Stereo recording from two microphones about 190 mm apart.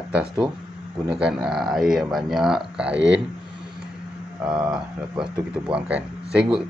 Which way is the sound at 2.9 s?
70° right (ahead or behind).